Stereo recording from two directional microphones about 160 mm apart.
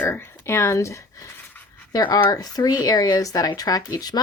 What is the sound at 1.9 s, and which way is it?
Speech, 25° left (ahead or behind).